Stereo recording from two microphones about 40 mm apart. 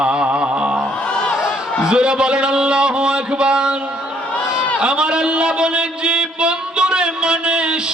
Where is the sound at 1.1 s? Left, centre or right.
Left.